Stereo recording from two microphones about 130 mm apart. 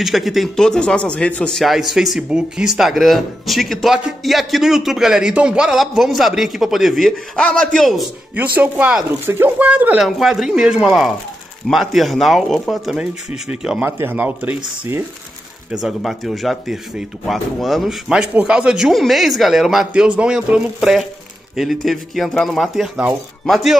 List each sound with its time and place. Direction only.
0.0 s speech: centre (ahead or behind)
8.4 s speech: 10° right (ahead or behind)
10.0 s speech: centre (ahead or behind)
13.8 s speech: 20° right (ahead or behind)
15.7 s speech: centre (ahead or behind)